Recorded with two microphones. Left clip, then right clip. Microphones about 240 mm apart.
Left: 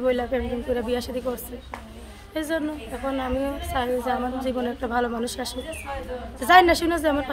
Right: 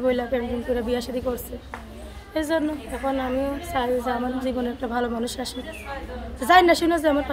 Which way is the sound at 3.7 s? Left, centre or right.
Centre.